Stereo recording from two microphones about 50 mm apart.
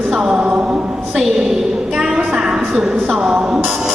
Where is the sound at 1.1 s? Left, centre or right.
Centre.